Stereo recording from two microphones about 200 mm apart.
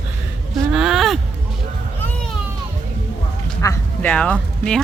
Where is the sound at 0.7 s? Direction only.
5° right (ahead or behind).